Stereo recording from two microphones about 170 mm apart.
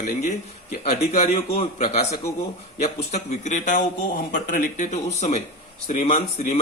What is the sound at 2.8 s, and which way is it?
Speech, 40° left (ahead or behind).